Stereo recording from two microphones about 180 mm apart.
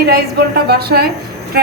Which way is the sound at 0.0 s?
60° right (ahead or behind).